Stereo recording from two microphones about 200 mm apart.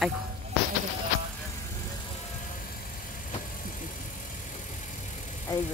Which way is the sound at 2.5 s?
45° left (ahead or behind).